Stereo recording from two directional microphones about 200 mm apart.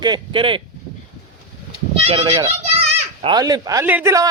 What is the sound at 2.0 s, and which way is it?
Speech, 30° right (ahead or behind).